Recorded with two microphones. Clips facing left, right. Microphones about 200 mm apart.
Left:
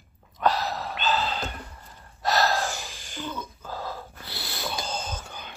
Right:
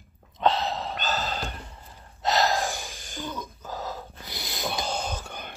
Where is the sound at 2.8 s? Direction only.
50° right (ahead or behind).